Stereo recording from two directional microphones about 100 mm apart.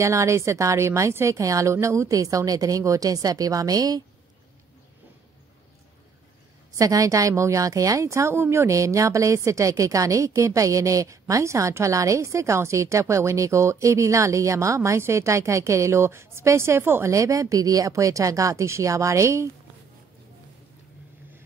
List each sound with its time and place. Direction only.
0.0 s a woman's voice: 30° right (ahead or behind)
6.7 s a woman's voice: 35° right (ahead or behind)